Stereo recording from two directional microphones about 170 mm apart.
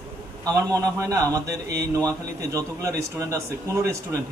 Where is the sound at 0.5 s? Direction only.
20° right (ahead or behind).